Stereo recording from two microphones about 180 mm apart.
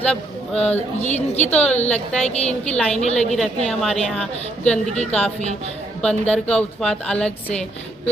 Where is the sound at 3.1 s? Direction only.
40° left (ahead or behind).